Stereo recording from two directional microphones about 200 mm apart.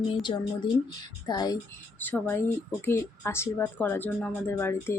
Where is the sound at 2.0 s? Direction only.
10° left (ahead or behind).